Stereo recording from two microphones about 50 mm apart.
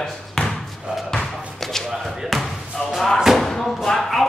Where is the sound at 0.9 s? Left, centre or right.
Centre.